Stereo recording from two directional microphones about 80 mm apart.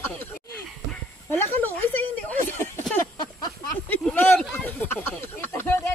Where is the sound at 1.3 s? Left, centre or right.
Left.